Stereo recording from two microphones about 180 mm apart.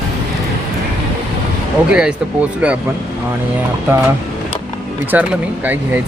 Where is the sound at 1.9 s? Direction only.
5° right (ahead or behind).